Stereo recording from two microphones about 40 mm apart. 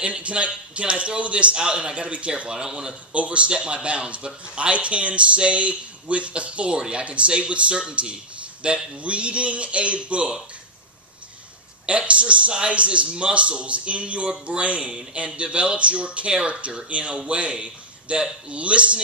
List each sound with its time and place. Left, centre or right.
0.0 s a man's voice: right
3.1 s a man's voice: right
11.8 s a man's voice: right